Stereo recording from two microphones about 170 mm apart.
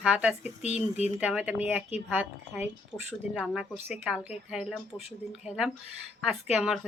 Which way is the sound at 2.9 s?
15° left (ahead or behind).